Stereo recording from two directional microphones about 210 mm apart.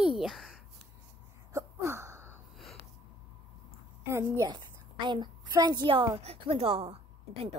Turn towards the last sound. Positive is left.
turn(degrees=-25)  # may be behind; listen again after turning